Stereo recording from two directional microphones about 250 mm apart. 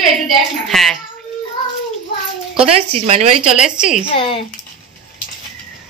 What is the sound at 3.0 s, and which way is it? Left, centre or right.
Speech, right.